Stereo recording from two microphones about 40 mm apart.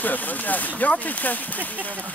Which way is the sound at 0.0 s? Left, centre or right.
Left.